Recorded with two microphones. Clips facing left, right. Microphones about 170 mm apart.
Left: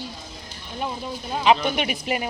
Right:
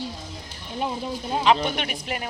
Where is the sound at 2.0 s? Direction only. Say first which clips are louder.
Left 5 dB; 10° left (ahead or behind).